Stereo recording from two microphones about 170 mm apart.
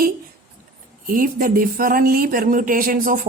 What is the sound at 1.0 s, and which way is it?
Speech, 55° right (ahead or behind).